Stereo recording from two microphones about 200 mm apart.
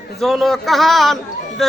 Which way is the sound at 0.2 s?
Centre (ahead or behind).